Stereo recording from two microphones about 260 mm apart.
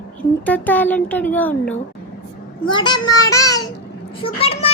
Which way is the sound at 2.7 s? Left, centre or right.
Centre.